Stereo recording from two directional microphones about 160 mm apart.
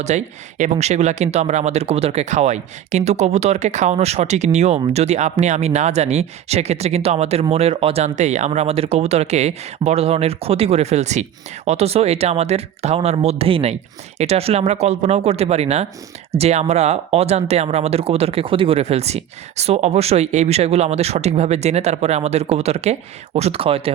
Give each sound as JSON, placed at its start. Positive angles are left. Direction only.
{"t": 0.1, "sound": "speech", "side_deg": -45}